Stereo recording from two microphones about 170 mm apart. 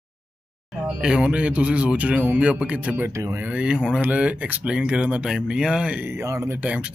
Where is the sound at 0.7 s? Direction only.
5° right (ahead or behind).